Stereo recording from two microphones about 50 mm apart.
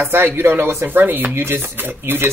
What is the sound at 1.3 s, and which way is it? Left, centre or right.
Speech, right.